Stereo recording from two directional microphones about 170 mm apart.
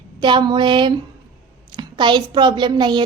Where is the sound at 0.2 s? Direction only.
25° right (ahead or behind).